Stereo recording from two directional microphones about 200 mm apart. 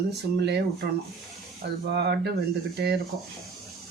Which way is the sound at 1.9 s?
55° right (ahead or behind).